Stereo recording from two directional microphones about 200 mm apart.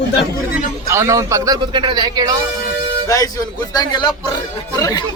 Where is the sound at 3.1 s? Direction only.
15° left (ahead or behind).